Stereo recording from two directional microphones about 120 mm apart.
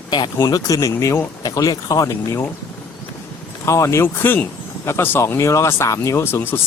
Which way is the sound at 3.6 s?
25° left (ahead or behind).